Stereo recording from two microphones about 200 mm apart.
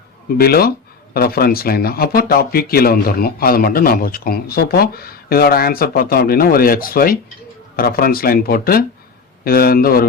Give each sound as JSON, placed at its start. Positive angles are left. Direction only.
{"t": 0.3, "sound": "speech", "side_deg": 50}